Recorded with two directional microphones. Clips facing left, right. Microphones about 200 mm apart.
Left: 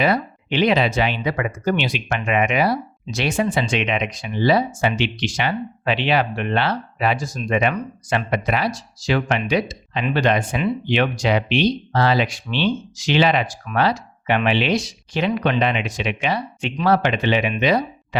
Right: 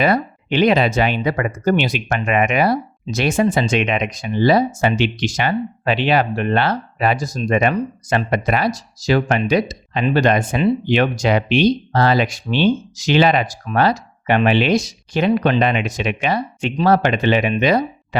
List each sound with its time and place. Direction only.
0.0 s speech: 50° right (ahead or behind)